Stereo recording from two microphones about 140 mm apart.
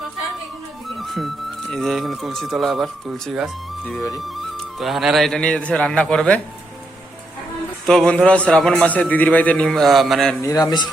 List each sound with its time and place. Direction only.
0.9 s music: centre (ahead or behind)
1.7 s a man's voice: centre (ahead or behind)
7.9 s a man's voice: 5° left (ahead or behind)
10.4 s a man's voice: 25° left (ahead or behind)